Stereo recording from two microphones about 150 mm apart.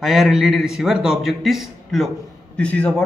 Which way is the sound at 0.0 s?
Centre (ahead or behind).